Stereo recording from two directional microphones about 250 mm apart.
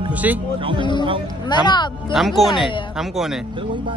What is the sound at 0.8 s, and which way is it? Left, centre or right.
Speech, centre.